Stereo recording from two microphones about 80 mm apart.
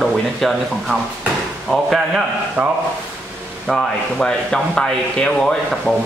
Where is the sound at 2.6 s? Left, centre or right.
Right.